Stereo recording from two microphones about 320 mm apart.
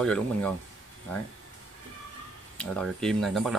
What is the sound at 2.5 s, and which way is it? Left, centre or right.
Speech, centre.